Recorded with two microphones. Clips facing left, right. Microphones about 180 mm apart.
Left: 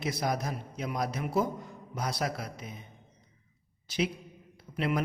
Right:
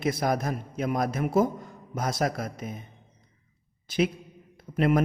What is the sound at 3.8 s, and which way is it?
Speech, 50° right (ahead or behind).